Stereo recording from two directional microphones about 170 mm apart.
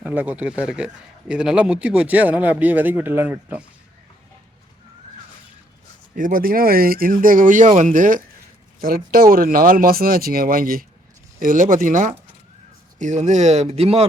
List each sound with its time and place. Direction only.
0.0 s speech: 10° right (ahead or behind)
6.1 s speech: 55° right (ahead or behind); by 14.1 s 35° right (ahead or behind)